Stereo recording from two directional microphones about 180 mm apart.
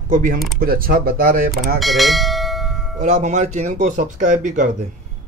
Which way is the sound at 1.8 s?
Centre (ahead or behind).